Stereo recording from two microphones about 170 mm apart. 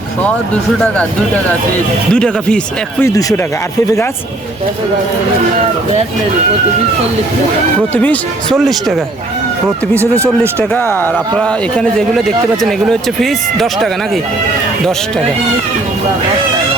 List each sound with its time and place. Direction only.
0.3 s speech: 5° left (ahead or behind)
2.1 s speech: 5° left (ahead or behind)
3.0 s speech: 20° left (ahead or behind)
7.9 s speech: 10° left (ahead or behind)
10.6 s speech: 10° left (ahead or behind)